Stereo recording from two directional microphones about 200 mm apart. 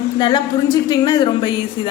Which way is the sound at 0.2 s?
20° left (ahead or behind).